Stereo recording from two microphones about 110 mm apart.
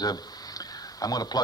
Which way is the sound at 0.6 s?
35° left (ahead or behind).